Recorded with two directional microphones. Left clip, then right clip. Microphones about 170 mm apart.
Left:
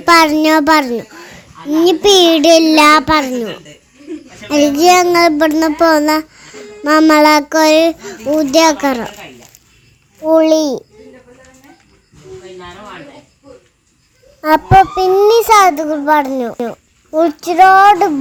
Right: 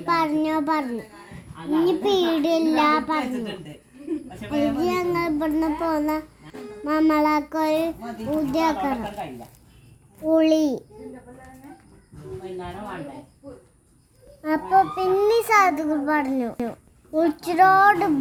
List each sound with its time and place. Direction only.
0.0 s a child's voice: 60° left (ahead or behind)
4.4 s a child's voice: 55° left (ahead or behind)
10.2 s a child's voice: 15° left (ahead or behind)
14.4 s speech: 35° left (ahead or behind)
15.1 s a child's voice: 20° left (ahead or behind)